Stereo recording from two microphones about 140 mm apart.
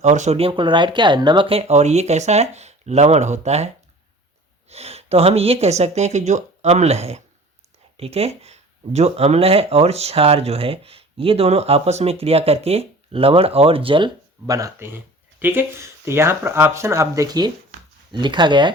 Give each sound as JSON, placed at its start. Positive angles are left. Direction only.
{"t": 0.0, "sound": "speech", "side_deg": -55}
{"t": 4.7, "sound": "speech", "side_deg": -50}
{"t": 14.4, "sound": "speech", "side_deg": -25}